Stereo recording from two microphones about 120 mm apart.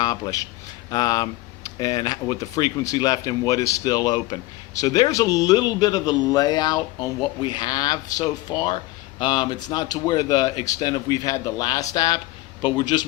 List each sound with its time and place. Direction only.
0.0 s a man's voice: 30° left (ahead or behind)